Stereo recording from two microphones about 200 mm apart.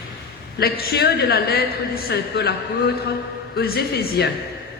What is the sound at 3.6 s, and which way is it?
Speech, 50° left (ahead or behind).